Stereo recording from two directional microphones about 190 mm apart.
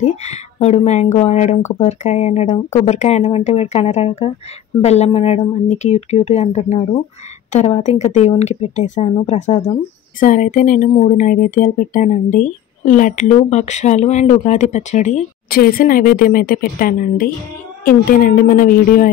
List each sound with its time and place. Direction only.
0.0 s a woman's voice: 35° left (ahead or behind)
10.2 s a woman's voice: 45° left (ahead or behind)